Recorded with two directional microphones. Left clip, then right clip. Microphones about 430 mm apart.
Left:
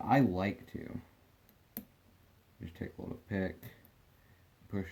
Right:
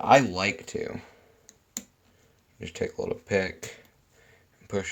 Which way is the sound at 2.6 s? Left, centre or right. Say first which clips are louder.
Right 15 dB; centre.